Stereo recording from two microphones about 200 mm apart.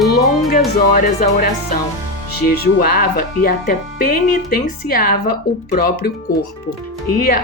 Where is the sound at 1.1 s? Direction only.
50° left (ahead or behind).